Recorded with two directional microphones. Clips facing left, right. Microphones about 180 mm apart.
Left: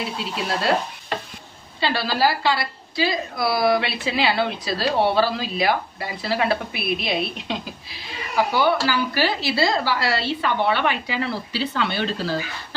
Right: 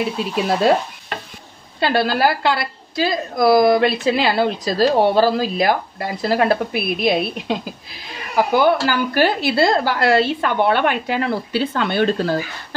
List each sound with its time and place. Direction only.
1.8 s a woman's voice: 55° right (ahead or behind)